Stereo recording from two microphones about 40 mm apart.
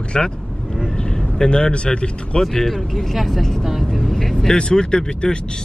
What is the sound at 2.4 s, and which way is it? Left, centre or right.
Speech, centre.